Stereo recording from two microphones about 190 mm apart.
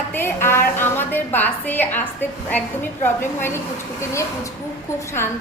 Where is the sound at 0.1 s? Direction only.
10° left (ahead or behind).